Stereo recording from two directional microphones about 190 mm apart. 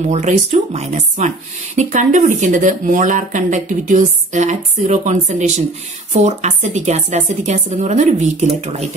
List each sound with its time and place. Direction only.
0.1 s speech: 35° right (ahead or behind)